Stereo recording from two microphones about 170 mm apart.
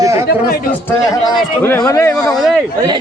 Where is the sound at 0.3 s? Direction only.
60° left (ahead or behind).